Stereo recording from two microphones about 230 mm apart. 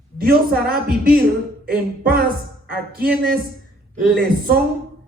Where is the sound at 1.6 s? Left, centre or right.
Right.